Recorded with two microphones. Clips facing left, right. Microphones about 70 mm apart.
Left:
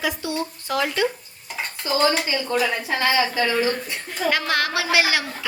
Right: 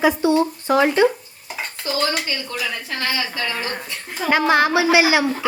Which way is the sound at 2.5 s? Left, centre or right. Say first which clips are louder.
Left 7 dB; left.